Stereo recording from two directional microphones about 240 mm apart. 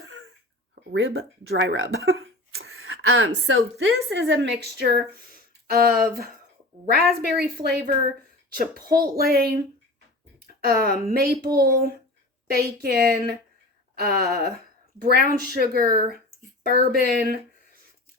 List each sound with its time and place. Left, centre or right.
0.0 s a sound: right
0.9 s speech: right
2.0 s cough: right
2.6 s a woman's voice: right
10.4 s a sound: right
11.1 s a woman's voice: right